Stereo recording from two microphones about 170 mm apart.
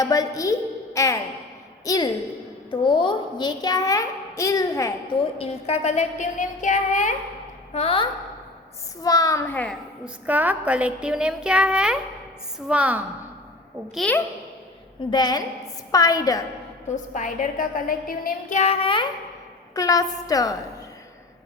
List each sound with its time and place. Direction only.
0.0 s a child's voice: 20° left (ahead or behind)
5.4 s a woman's voice: 35° left (ahead or behind)
7.7 s a woman's voice: 35° left (ahead or behind)
9.0 s a child's voice: 20° left (ahead or behind)
10.2 s a woman's voice: 10° right (ahead or behind)
13.9 s a woman's voice: 5° left (ahead or behind)
15.1 s a child's voice: 25° left (ahead or behind)
16.9 s a woman's voice: 50° left (ahead or behind); by 19.0 s 30° left (ahead or behind)
19.7 s a child's voice: 20° left (ahead or behind)